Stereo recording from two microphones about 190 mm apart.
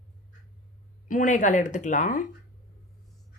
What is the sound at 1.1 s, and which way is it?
Speech, 45° left (ahead or behind).